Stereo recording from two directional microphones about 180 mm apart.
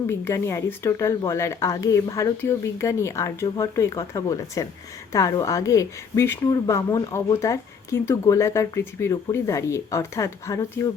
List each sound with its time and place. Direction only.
0.1 s a woman's voice: 15° left (ahead or behind)